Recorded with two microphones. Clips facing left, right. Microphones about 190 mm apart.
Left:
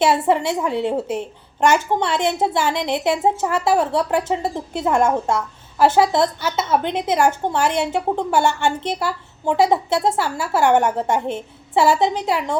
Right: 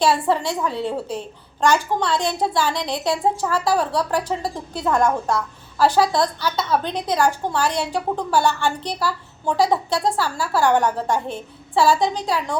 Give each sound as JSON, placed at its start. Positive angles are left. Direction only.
{"t": 0.0, "sound": "a woman's voice", "side_deg": 20}